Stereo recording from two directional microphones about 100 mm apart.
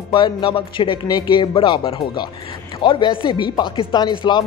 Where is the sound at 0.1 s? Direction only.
55° left (ahead or behind).